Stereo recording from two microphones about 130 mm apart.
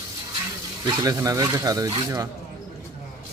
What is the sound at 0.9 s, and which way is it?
Speech, 25° right (ahead or behind).